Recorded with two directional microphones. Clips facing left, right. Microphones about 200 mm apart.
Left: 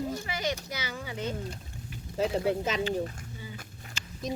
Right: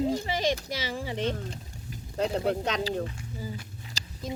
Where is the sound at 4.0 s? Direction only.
35° right (ahead or behind).